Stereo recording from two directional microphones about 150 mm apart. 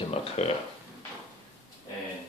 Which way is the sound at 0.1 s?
40° left (ahead or behind).